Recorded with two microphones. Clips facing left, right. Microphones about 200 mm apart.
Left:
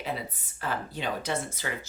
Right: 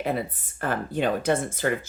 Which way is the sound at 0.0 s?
55° right (ahead or behind).